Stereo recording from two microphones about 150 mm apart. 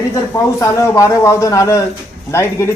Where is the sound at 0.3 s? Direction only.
20° left (ahead or behind).